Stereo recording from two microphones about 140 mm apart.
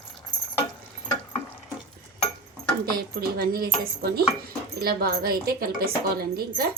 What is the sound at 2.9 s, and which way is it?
A woman's voice, 90° right.